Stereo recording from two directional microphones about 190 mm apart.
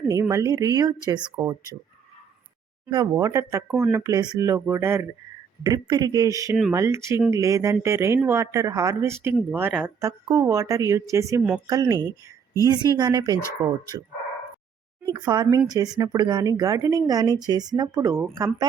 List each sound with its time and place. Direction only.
0.1 s speech: 15° right (ahead or behind)
2.9 s a woman's voice: 20° right (ahead or behind)
15.1 s a woman's voice: 20° right (ahead or behind)